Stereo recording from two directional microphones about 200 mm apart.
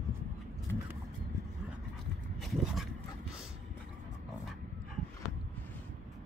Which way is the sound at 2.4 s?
Centre (ahead or behind).